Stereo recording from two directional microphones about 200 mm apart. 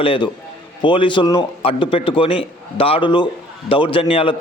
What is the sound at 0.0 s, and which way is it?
A man's voice, 25° left (ahead or behind).